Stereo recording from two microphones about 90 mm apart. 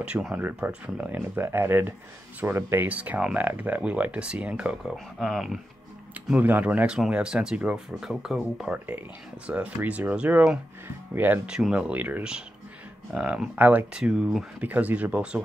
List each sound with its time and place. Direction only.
0.0 s speech: 10° right (ahead or behind)
4.9 s speech: centre (ahead or behind)
6.4 s speech: 20° right (ahead or behind)
9.5 s speech: 20° right (ahead or behind)
11.1 s speech: 20° right (ahead or behind)
11.4 s speech: 10° right (ahead or behind)